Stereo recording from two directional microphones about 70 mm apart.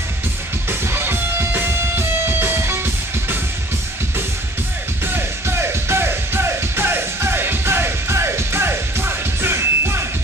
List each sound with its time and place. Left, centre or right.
0.7 s music: right
5.0 s music: right